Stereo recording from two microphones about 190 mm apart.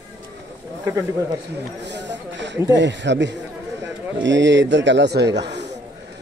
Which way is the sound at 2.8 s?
70° right (ahead or behind).